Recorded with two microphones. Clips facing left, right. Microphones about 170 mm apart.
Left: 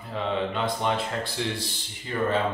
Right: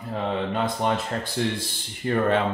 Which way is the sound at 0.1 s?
45° right (ahead or behind).